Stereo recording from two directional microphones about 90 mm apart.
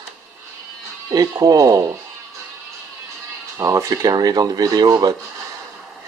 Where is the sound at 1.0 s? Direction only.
40° right (ahead or behind).